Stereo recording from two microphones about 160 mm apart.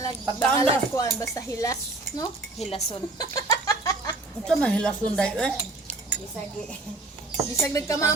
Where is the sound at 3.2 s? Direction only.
20° left (ahead or behind).